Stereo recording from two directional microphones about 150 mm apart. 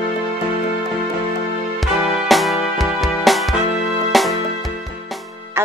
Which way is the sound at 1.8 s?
Centre (ahead or behind).